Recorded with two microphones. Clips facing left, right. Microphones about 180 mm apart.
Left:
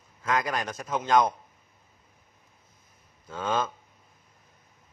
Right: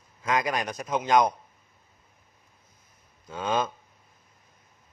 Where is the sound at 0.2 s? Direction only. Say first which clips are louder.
Right 1 dB; 15° right (ahead or behind).